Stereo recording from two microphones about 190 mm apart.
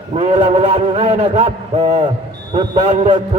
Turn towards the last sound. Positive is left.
turn(degrees=-35)  # may be behind; listen again after turning